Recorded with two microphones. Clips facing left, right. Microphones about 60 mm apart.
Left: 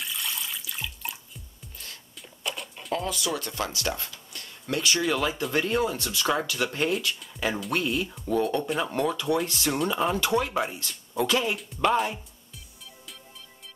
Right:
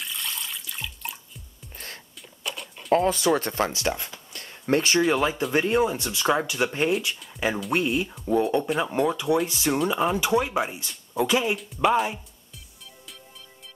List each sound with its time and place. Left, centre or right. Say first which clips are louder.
0.0 s water: even; centre
2.4 s bird: even; centre
2.9 s speech: right 9 dB; right
4.4 s a sound: right 6 dB; right
5.0 s speech: right 4 dB; right